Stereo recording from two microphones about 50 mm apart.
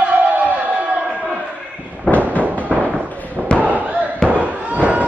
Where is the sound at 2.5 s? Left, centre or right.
Right.